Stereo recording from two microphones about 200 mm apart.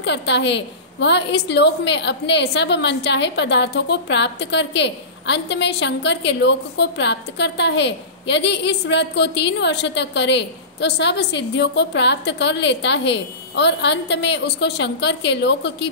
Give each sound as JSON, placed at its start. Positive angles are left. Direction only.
{"t": 0.0, "sound": "a woman's voice", "side_deg": 60}